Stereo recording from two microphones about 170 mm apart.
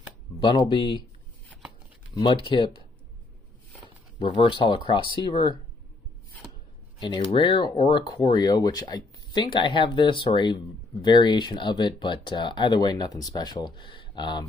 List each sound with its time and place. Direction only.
0.4 s speech: 30° left (ahead or behind)
2.1 s speech: 30° left (ahead or behind)
4.2 s speech: 30° left (ahead or behind)
7.3 s speech: 25° left (ahead or behind)